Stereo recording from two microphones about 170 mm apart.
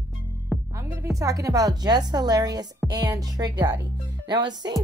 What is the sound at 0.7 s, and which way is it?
A woman's voice, 20° right (ahead or behind).